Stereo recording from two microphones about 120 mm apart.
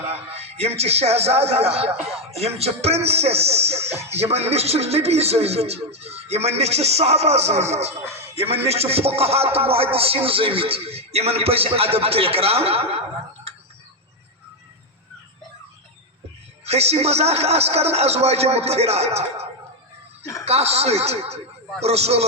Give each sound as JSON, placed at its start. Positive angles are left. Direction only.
{"t": 0.1, "sound": "speech", "side_deg": -60}
{"t": 16.6, "sound": "speech", "side_deg": -60}